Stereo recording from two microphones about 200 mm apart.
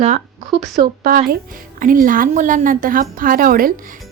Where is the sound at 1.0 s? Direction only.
50° right (ahead or behind).